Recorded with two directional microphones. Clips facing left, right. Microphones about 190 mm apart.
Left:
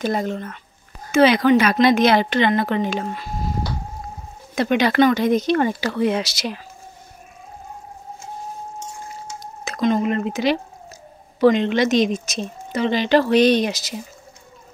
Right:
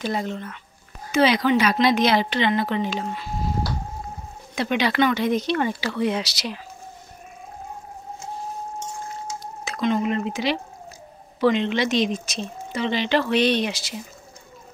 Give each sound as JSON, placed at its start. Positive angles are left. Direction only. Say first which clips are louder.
{"t": 0.0, "sound": "speech", "louder": "left 4 dB", "side_deg": 45}
{"t": 4.6, "sound": "speech", "louder": "left 5 dB", "side_deg": 45}
{"t": 9.7, "sound": "speech", "louder": "left 3 dB", "side_deg": 40}